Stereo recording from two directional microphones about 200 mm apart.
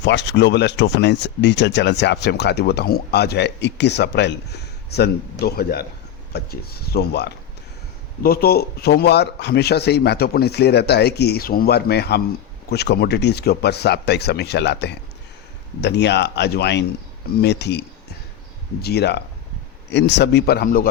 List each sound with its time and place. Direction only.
0.0 s speech: 60° left (ahead or behind)